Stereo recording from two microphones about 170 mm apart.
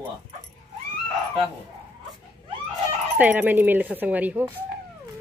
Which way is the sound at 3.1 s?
10° right (ahead or behind).